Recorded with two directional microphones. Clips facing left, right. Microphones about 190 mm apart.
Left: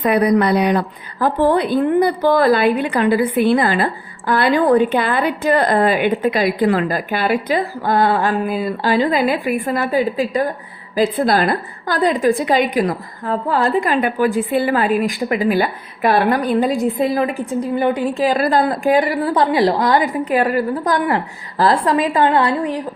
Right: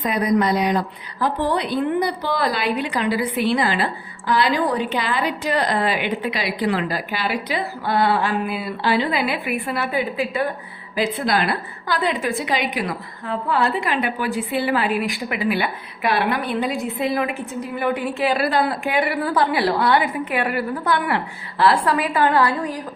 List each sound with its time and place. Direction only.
0.0 s a woman's voice: 65° left (ahead or behind); by 18.0 s 30° left (ahead or behind)
18.2 s a woman's voice: 45° left (ahead or behind)